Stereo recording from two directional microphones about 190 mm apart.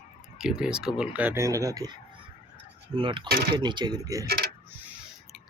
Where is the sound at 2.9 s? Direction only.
25° right (ahead or behind).